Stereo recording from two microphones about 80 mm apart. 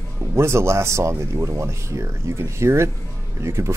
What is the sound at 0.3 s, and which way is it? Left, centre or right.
Speech, right.